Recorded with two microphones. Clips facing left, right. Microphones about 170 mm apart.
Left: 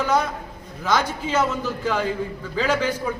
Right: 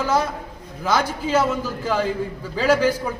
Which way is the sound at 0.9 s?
10° right (ahead or behind).